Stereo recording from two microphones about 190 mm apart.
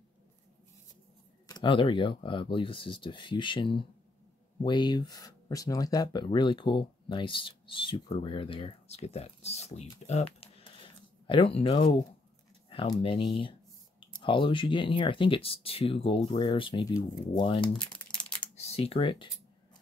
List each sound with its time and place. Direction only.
1.5 s speech: 25° left (ahead or behind)
18.8 s speech: 30° left (ahead or behind)